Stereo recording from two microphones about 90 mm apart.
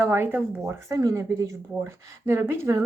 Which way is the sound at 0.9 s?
40° right (ahead or behind).